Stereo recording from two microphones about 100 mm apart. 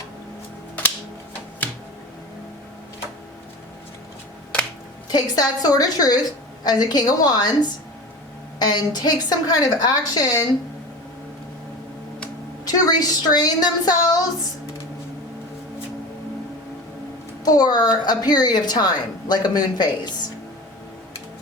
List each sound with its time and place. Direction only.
5.0 s a woman's voice: 40° left (ahead or behind)
12.6 s a woman's voice: 40° left (ahead or behind)
17.4 s a woman's voice: 40° left (ahead or behind)